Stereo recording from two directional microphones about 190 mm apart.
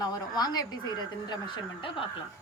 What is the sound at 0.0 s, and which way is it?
Speech, 20° left (ahead or behind).